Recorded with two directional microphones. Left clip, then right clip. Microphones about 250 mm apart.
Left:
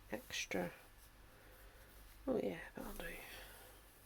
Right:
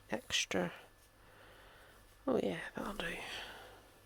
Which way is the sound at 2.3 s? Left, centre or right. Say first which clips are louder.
Right 5 dB; right.